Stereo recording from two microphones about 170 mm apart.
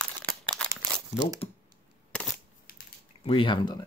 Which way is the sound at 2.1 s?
5° left (ahead or behind).